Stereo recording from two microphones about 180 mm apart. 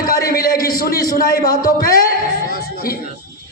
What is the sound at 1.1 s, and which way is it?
Speech, 55° left (ahead or behind).